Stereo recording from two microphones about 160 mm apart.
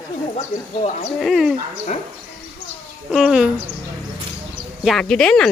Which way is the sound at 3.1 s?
Centre (ahead or behind).